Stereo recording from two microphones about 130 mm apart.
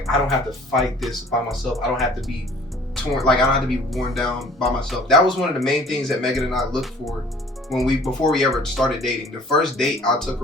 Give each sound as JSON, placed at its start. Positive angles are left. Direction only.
{"t": 0.0, "sound": "speech", "side_deg": 0}